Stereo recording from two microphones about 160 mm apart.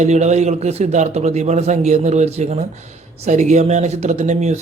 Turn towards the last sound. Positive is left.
turn(degrees=-45)  # may be behind; listen again after turning